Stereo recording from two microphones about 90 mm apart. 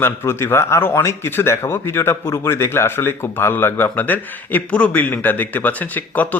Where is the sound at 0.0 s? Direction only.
25° left (ahead or behind).